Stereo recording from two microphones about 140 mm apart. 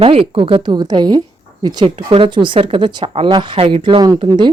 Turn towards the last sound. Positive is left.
turn(degrees=-35)  # may be behind; listen again after turning